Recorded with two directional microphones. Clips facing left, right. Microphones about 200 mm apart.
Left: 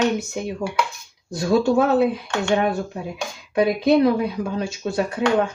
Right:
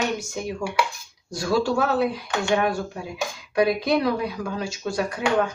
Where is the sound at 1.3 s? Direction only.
20° left (ahead or behind).